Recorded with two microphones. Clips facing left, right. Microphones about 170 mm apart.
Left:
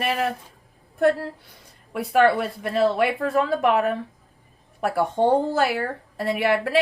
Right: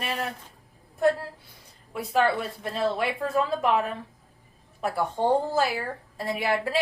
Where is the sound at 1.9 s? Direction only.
65° left (ahead or behind).